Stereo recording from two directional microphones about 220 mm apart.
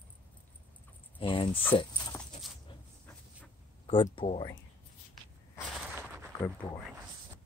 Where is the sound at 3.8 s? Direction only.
25° left (ahead or behind).